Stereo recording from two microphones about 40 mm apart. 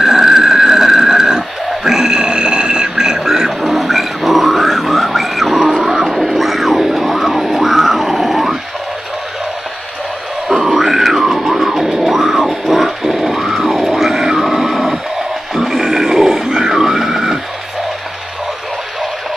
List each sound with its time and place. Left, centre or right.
0.0 s a sound: centre
5.8 s music: centre
6.0 s music: centre
10.5 s music: centre
15.5 s grunt: centre